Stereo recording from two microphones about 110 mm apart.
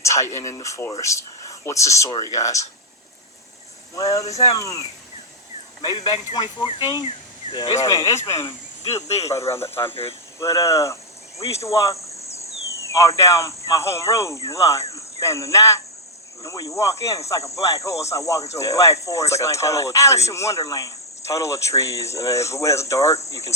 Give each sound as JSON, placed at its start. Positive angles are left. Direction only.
{"t": 0.0, "sound": "speech", "side_deg": 30}
{"t": 3.9, "sound": "speech", "side_deg": 30}
{"t": 6.3, "sound": "speech", "side_deg": 45}
{"t": 7.8, "sound": "speech", "side_deg": 30}